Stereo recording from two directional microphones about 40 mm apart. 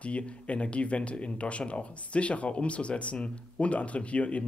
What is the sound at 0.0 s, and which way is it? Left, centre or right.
Speech, left.